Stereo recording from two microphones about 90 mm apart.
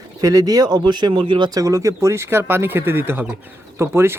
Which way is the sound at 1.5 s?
40° right (ahead or behind).